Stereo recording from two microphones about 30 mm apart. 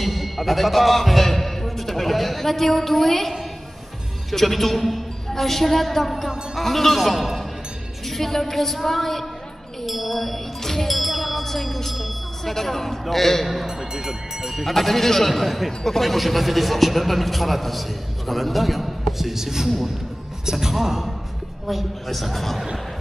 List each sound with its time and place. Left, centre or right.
0.0 s a man's voice: centre
8.1 s a sound: centre
9.8 s a man's voice: centre
10.9 s music: centre
11.9 s speech: centre
12.5 s a sound: centre
13.7 s speech: centre
14.5 s a man's voice: centre